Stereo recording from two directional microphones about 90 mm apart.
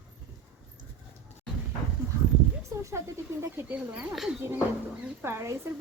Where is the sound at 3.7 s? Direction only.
10° right (ahead or behind).